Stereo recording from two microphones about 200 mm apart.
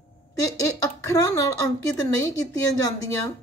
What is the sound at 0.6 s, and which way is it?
Speech, 15° left (ahead or behind).